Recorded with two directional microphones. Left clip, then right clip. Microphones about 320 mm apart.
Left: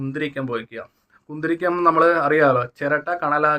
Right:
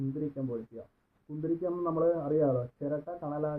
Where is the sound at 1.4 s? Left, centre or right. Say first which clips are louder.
Left 12 dB; left.